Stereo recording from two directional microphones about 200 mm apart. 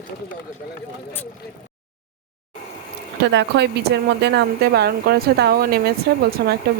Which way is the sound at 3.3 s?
60° right (ahead or behind).